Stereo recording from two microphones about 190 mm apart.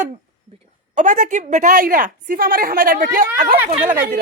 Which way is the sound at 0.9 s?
40° right (ahead or behind).